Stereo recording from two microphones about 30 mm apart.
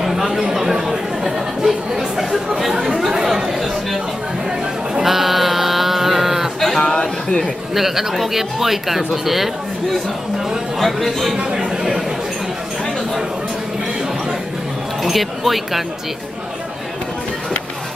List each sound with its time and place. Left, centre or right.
0.0 s chatter: centre
3.5 s chatter: centre
5.0 s a sound: centre
6.8 s a sound: centre
7.7 s speech: centre
10.8 s speech: centre
15.0 s speech: centre